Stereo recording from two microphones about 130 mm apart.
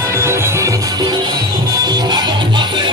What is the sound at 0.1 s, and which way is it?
Music, 20° right (ahead or behind).